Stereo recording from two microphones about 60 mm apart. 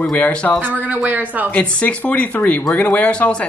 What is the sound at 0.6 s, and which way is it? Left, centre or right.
Speech, right.